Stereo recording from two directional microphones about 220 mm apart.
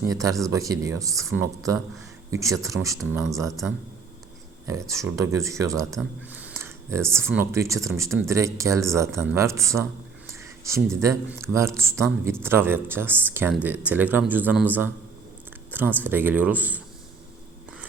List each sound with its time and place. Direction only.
0.1 s speech: 15° right (ahead or behind)
3.0 s speech: 5° right (ahead or behind)
4.6 s speech: 15° right (ahead or behind)
6.0 s a sound: 5° right (ahead or behind)
7.1 s speech: 10° right (ahead or behind)